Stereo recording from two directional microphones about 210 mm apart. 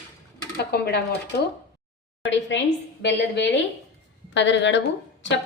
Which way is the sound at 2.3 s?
60° left (ahead or behind).